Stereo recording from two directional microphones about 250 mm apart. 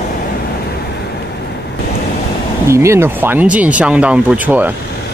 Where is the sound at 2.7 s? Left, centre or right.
Centre.